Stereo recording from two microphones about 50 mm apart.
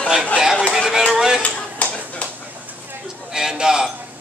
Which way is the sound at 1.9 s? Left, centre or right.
Left.